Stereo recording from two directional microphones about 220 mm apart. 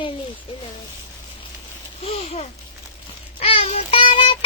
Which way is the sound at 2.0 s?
30° left (ahead or behind).